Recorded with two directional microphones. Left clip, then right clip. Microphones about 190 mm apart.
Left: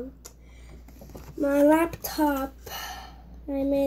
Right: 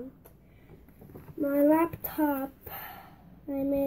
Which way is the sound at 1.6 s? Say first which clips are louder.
Left 2 dB; centre (ahead or behind).